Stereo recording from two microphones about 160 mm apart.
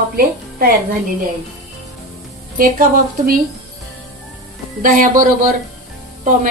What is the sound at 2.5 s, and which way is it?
Speech, 60° right (ahead or behind).